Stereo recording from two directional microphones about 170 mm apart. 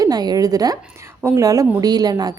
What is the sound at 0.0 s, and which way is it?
A woman's voice, 25° right (ahead or behind).